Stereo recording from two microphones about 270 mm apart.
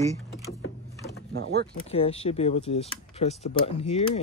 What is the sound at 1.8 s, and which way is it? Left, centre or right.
Speech, left.